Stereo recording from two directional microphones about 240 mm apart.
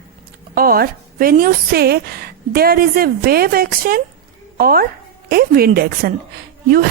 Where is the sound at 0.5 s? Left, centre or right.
Right.